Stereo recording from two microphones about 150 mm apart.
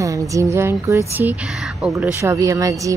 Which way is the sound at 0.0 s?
20° right (ahead or behind).